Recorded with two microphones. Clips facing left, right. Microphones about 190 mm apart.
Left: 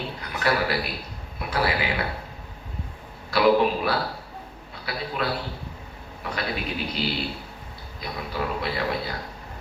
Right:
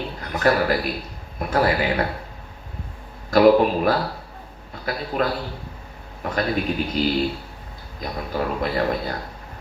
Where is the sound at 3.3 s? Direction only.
45° right (ahead or behind).